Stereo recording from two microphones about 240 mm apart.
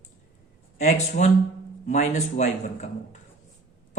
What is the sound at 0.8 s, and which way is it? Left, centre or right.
Speech, left.